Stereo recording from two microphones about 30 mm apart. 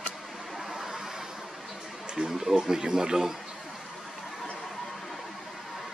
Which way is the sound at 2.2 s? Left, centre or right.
Centre.